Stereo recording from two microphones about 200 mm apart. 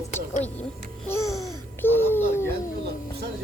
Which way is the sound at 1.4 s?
10° left (ahead or behind).